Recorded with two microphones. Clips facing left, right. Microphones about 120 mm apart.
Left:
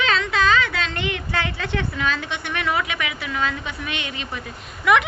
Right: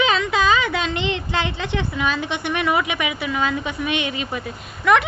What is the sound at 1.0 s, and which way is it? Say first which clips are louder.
A woman's voice: right 2 dB; 25° right (ahead or behind).